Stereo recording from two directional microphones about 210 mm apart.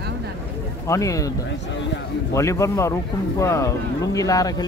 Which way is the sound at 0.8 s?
15° left (ahead or behind).